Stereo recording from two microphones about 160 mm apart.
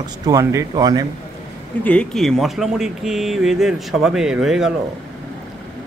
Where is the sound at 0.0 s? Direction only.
20° right (ahead or behind).